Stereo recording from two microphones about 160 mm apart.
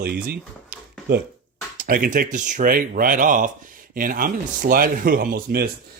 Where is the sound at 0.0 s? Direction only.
70° right (ahead or behind).